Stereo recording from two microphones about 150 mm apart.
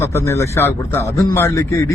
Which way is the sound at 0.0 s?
20° left (ahead or behind).